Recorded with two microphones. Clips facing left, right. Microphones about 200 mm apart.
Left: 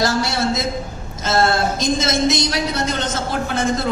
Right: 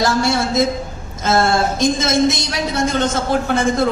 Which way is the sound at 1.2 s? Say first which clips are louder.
Right 2 dB; 55° right (ahead or behind).